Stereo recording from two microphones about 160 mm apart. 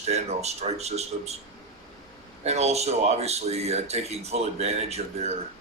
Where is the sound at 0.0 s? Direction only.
40° right (ahead or behind).